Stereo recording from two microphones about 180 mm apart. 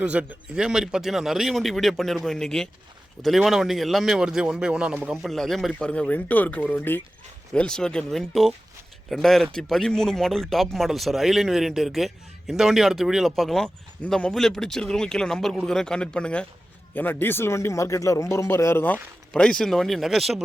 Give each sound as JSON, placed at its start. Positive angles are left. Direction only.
{"t": 0.0, "sound": "a man's voice", "side_deg": -5}